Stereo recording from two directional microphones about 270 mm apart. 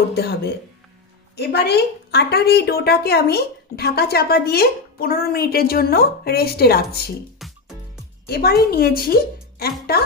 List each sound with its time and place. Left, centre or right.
0.1 s a woman's voice: left
8.3 s a woman's voice: left